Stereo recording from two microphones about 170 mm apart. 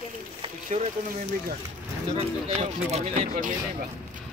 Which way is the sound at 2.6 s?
40° right (ahead or behind).